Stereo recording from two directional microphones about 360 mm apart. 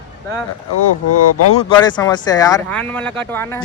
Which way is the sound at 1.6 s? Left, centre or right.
Centre.